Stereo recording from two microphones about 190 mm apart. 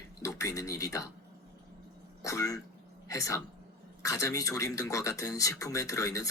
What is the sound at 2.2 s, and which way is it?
A man's voice, 15° left (ahead or behind).